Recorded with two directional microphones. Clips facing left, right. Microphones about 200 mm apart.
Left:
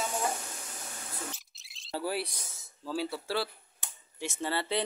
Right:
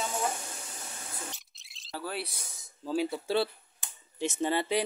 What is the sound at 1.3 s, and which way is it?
Bird, centre (ahead or behind).